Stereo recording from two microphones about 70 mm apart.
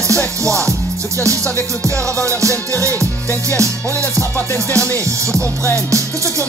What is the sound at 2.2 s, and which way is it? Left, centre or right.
Music, right.